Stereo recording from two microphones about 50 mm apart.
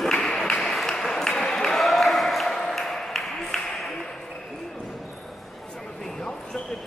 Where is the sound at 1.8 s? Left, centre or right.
Centre.